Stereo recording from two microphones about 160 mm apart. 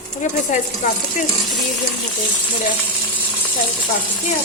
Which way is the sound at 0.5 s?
50° left (ahead or behind).